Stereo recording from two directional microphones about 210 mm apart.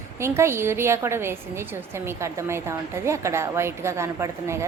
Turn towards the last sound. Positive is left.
turn(degrees=-15)  # may be behind; listen again after turning